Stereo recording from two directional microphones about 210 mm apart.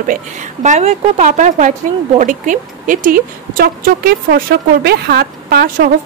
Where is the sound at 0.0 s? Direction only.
40° right (ahead or behind).